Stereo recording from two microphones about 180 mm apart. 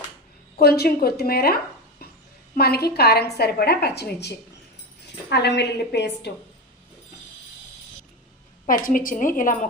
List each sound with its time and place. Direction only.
0.5 s a woman's voice: 60° left (ahead or behind)
5.3 s a woman's voice: 70° left (ahead or behind)
8.6 s a woman's voice: 50° left (ahead or behind)